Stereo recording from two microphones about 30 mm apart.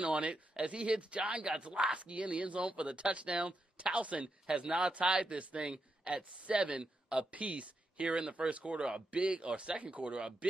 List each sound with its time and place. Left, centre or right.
0.0 s speech: right
6.8 s a man's voice: right
7.2 s speech: right
9.8 s speech: right